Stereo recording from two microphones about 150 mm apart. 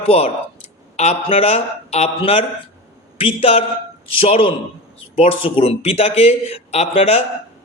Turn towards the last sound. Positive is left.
turn(degrees=40)  # may be behind; listen again after turning